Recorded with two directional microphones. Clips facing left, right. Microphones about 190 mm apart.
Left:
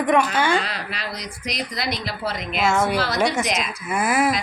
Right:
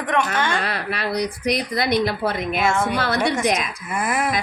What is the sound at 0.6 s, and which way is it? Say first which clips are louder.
Speech: right 3 dB; 60° right (ahead or behind).